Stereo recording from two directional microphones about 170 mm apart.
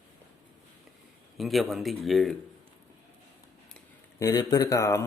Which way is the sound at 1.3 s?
Centre (ahead or behind).